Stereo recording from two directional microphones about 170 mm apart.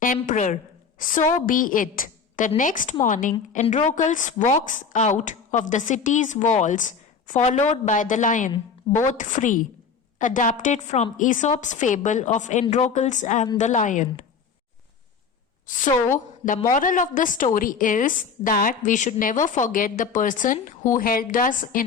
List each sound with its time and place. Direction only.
0.2 s a woman's voice: 45° left (ahead or behind)
15.6 s a woman's voice: 50° left (ahead or behind)